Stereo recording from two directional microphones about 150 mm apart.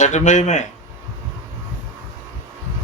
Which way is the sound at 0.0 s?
50° left (ahead or behind).